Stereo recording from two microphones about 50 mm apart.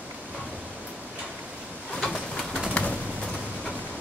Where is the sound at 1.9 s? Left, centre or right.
Centre.